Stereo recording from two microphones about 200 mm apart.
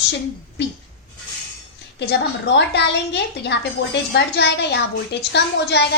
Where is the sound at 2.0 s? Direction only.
60° left (ahead or behind).